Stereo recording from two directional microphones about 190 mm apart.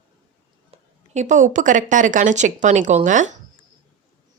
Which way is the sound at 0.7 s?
40° right (ahead or behind).